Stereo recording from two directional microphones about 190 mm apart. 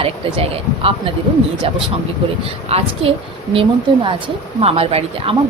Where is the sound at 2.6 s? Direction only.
30° right (ahead or behind).